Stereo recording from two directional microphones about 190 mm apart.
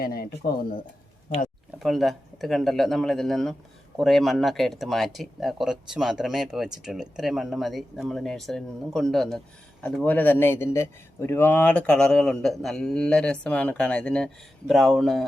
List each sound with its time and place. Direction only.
0.0 s speech: 50° left (ahead or behind)
1.8 s speech: centre (ahead or behind)